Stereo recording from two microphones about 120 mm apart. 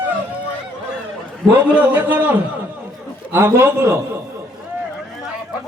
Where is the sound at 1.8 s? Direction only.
15° right (ahead or behind).